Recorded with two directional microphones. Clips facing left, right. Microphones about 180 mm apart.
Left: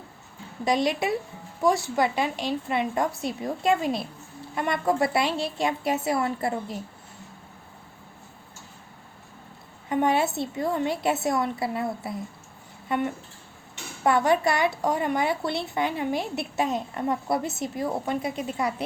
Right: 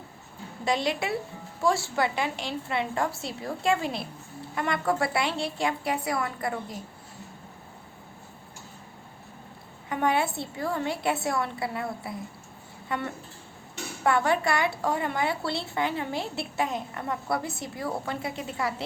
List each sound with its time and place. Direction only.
0.6 s speech: 20° left (ahead or behind)
9.9 s speech: 20° left (ahead or behind)